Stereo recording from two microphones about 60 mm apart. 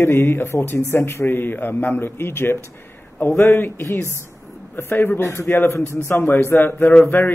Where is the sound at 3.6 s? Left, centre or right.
Left.